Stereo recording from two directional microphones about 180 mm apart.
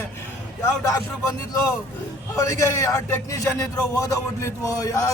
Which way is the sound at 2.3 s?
15° left (ahead or behind).